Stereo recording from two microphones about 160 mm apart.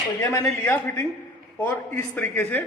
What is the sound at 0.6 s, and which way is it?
A man's voice, 15° left (ahead or behind).